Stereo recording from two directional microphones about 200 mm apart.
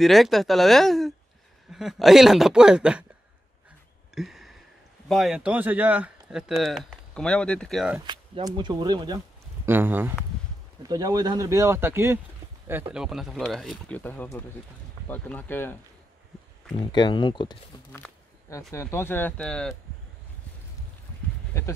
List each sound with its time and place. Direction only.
0.0 s speech: centre (ahead or behind)
4.1 s a sound: centre (ahead or behind)
5.0 s speech: centre (ahead or behind)
8.1 s speech: 20° right (ahead or behind); by 15.7 s 10° left (ahead or behind)
16.7 s speech: 20° left (ahead or behind)
17.9 s speech: 10° left (ahead or behind)